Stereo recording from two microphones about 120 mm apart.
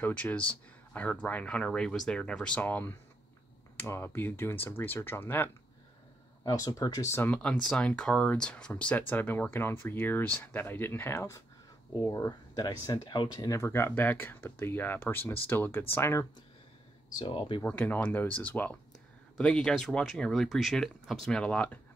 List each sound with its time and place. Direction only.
0.0 s speech: 10° left (ahead or behind)
6.4 s speech: 30° left (ahead or behind)
7.2 s speech: 10° left (ahead or behind)
17.2 s speech: 45° left (ahead or behind)
17.6 s speech: 15° left (ahead or behind)